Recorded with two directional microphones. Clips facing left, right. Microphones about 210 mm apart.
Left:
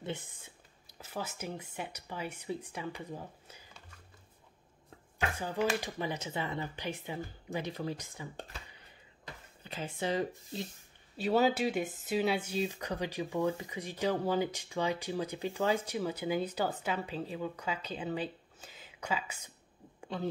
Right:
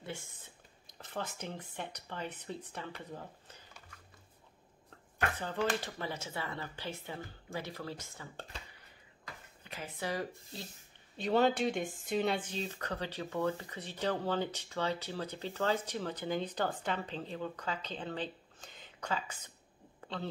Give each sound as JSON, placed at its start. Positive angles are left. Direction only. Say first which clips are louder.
{"t": 0.8, "sound": "speech", "louder": "left 1 dB", "side_deg": 10}
{"t": 5.4, "sound": "speech", "louder": "left 3 dB", "side_deg": 10}
{"t": 9.2, "sound": "speech", "louder": "left 2 dB", "side_deg": 25}
{"t": 11.1, "sound": "speech", "louder": "left 1 dB", "side_deg": 5}
{"t": 20.0, "sound": "a sound", "louder": "left 3 dB", "side_deg": 10}